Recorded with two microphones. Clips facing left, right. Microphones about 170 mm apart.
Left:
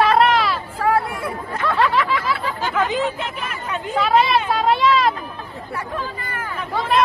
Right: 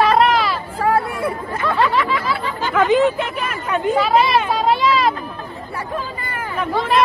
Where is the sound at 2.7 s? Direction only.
60° right (ahead or behind).